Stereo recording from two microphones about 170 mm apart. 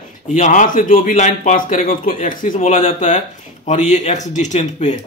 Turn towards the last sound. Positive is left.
turn(degrees=45)  # may be behind; listen again after turning